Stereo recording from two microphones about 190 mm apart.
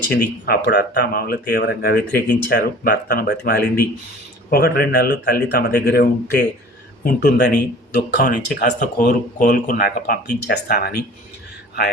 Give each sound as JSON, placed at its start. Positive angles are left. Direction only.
{"t": 0.1, "sound": "speech", "side_deg": 55}